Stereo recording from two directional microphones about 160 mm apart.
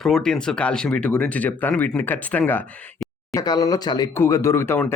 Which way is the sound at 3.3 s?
20° left (ahead or behind).